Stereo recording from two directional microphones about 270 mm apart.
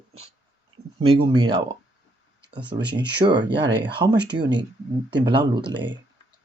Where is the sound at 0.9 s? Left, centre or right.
Right.